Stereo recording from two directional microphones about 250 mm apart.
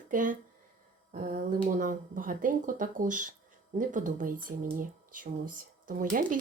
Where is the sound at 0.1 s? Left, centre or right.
Right.